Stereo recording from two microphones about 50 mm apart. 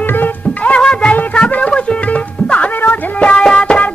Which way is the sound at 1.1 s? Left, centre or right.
Left.